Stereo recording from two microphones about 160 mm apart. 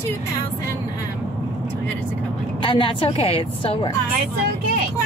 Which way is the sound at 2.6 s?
35° left (ahead or behind).